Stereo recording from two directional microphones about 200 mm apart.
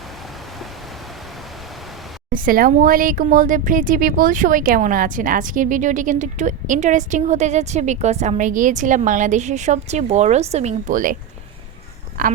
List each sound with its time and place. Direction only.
2.3 s speech: 45° right (ahead or behind)
12.2 s a woman's voice: 45° right (ahead or behind)